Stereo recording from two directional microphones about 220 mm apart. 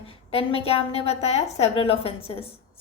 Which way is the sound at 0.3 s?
25° left (ahead or behind).